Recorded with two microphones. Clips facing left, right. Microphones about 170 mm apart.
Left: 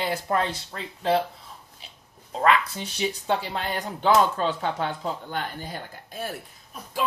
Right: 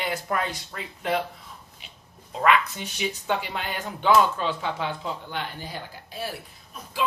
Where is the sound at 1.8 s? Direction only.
35° left (ahead or behind).